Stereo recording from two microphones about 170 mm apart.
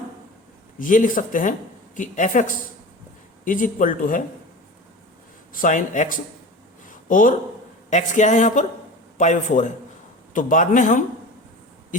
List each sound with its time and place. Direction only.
0.8 s speech: 50° left (ahead or behind)
5.5 s speech: 50° left (ahead or behind)
6.8 s a sound: 50° left (ahead or behind)
7.9 s speech: 45° left (ahead or behind)